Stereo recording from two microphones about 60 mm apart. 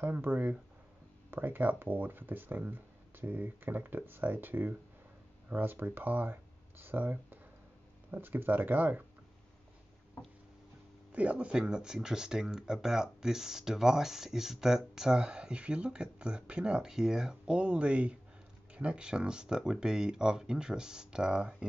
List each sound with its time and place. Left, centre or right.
0.0 s speech: right
11.1 s speech: right